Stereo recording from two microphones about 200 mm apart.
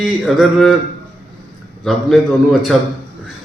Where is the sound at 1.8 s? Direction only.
Centre (ahead or behind).